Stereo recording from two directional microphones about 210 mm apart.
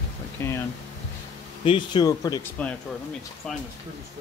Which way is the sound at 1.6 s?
25° left (ahead or behind).